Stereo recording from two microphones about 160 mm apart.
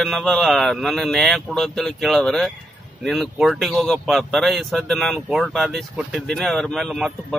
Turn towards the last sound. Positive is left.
turn(degrees=0)  # may be behind; listen again after turning